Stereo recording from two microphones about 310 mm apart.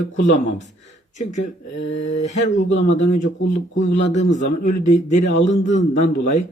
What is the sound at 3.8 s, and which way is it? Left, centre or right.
Speech, left.